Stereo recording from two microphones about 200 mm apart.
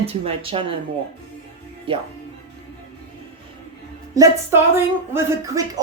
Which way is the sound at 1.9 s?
25° right (ahead or behind).